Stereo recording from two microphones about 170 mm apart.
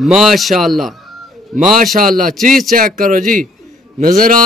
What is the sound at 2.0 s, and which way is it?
Speech, 55° right (ahead or behind).